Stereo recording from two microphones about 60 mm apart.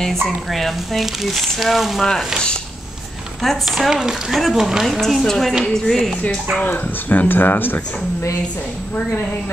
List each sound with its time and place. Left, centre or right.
0.0 s speech: centre
2.0 s sizzle: centre
3.4 s speech: centre
5.0 s speech: centre
6.6 s speech: left